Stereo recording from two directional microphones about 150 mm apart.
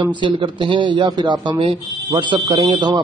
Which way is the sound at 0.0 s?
35° right (ahead or behind).